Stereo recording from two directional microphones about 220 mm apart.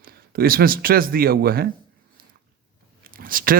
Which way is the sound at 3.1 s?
40° right (ahead or behind).